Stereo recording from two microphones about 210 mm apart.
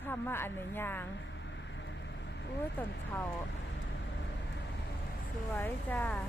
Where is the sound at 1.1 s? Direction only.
60° left (ahead or behind).